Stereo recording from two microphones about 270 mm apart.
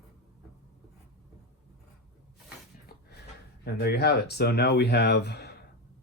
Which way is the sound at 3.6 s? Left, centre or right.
Left.